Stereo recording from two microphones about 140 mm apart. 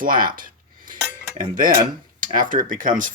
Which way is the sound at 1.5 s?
80° right.